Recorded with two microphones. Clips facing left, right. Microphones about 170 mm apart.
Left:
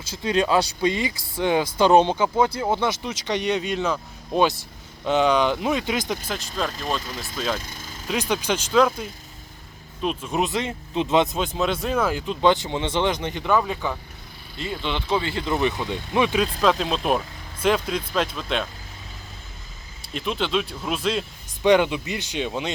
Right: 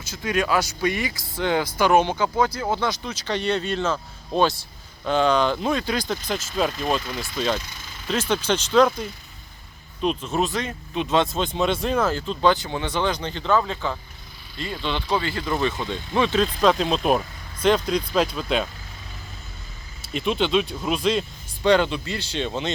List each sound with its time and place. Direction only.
0.0 s speech: 30° left (ahead or behind)
2.4 s speech: 25° left (ahead or behind)
5.0 s speech: 15° left (ahead or behind)
6.2 s speech: centre (ahead or behind)
7.6 s speech: 45° left (ahead or behind)
8.0 s speech: 10° left (ahead or behind)
11.3 s speech: 5° left (ahead or behind)
20.0 s speech: centre (ahead or behind)
21.6 s speech: 15° left (ahead or behind)